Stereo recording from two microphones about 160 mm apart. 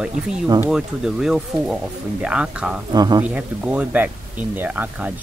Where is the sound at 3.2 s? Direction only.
5° right (ahead or behind).